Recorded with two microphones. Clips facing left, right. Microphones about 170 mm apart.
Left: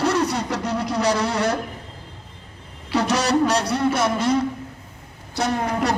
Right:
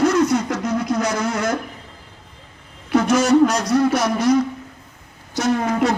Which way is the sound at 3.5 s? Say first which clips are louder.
Right 3 dB; 30° left (ahead or behind).